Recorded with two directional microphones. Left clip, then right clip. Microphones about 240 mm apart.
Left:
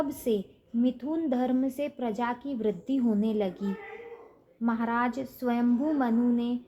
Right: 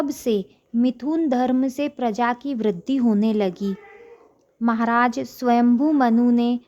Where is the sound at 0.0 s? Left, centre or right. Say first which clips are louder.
Right 6 dB; right.